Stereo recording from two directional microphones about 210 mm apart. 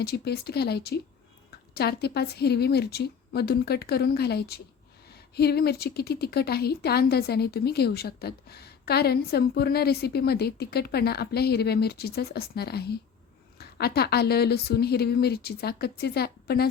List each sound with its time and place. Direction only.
0.0 s a woman's voice: 50° left (ahead or behind)